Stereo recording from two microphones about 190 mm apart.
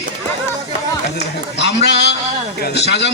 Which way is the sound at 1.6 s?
65° left (ahead or behind).